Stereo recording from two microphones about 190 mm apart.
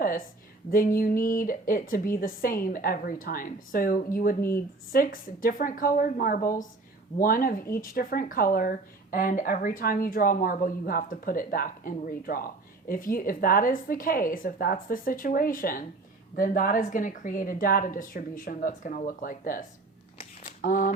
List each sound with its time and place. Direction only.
0.7 s a woman's voice: 50° left (ahead or behind)